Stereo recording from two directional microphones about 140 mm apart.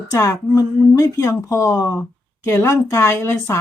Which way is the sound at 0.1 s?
20° left (ahead or behind).